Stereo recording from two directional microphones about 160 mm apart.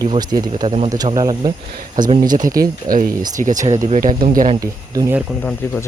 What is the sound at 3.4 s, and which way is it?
Speech, 50° right (ahead or behind).